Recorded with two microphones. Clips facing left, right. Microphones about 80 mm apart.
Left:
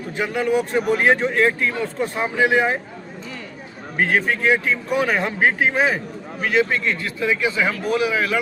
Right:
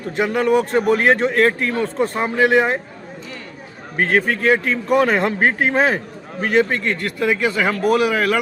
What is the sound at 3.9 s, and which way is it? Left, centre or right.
A man's voice, right.